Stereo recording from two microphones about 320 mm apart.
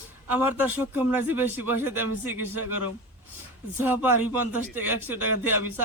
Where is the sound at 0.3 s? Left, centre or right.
Centre.